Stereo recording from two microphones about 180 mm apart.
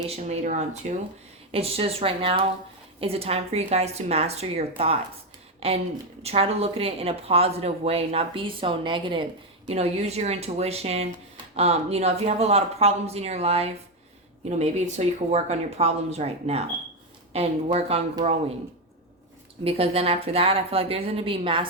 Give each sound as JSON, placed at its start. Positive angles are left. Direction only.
{"t": 0.1, "sound": "a woman's voice", "side_deg": -40}
{"t": 19.6, "sound": "a woman's voice", "side_deg": -35}